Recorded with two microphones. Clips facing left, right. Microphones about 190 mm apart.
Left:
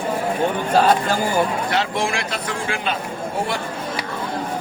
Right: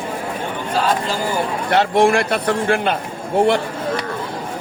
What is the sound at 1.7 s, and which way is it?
A man's voice, 55° right (ahead or behind).